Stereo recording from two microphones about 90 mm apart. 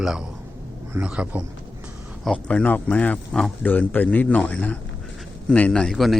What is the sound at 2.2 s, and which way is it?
A man's voice, 10° left (ahead or behind).